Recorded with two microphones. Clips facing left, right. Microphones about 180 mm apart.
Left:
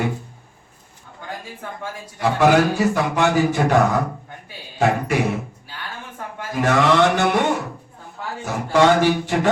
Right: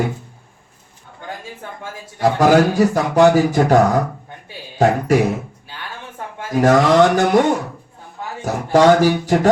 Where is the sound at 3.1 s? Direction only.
40° right (ahead or behind).